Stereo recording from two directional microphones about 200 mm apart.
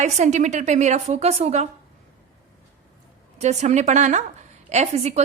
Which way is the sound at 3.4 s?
35° right (ahead or behind).